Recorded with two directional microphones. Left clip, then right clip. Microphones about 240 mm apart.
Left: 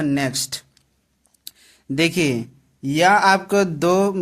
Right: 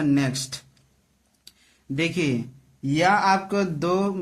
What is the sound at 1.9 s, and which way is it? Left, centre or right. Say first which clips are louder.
Speech: left 6 dB; left.